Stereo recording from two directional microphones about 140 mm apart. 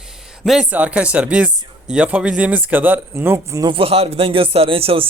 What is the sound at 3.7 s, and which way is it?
Speech, 45° right (ahead or behind).